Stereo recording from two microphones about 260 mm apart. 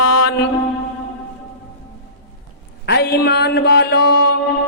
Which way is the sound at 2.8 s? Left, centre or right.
Left.